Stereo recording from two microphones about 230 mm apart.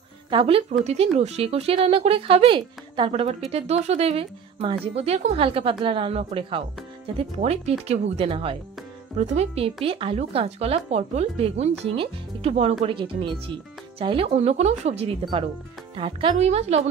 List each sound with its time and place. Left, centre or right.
0.3 s speech: right